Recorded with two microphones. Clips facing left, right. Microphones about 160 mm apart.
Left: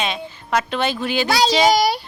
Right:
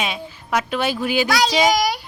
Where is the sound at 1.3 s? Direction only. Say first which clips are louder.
Left 4 dB; 30° left (ahead or behind).